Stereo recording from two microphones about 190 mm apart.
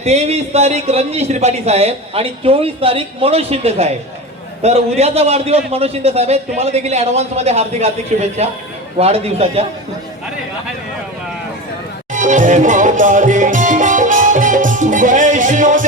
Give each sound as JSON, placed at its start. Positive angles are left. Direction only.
{"t": 0.0, "sound": "a man's voice", "side_deg": -35}
{"t": 12.1, "sound": "music", "side_deg": -40}